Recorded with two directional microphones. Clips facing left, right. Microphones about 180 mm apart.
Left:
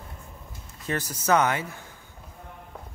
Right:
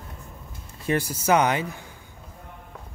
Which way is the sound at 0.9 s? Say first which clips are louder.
Right 2 dB; 10° right (ahead or behind).